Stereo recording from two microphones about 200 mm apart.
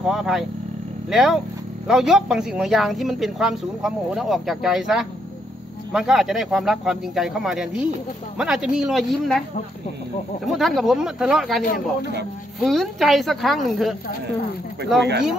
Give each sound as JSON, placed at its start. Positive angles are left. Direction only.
{"t": 0.0, "sound": "speech", "side_deg": -5}
{"t": 10.4, "sound": "speech", "side_deg": 0}
{"t": 11.6, "sound": "speech", "side_deg": 45}
{"t": 12.5, "sound": "speech", "side_deg": 0}